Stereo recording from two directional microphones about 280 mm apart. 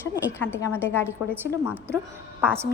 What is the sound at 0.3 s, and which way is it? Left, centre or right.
Speech, centre.